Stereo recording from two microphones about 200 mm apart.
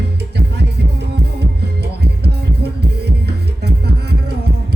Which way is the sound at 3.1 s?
55° right (ahead or behind).